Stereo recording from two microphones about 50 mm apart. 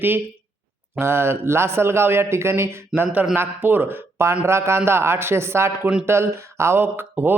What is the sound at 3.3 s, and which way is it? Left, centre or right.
Speech, right.